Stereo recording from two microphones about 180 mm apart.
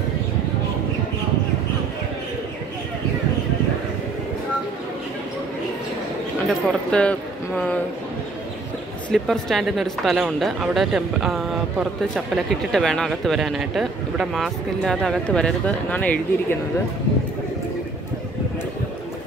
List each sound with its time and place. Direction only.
6.4 s speech: 5° left (ahead or behind)
9.1 s speech: centre (ahead or behind)